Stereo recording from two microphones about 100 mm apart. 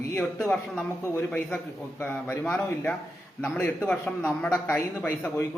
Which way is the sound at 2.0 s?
20° left (ahead or behind).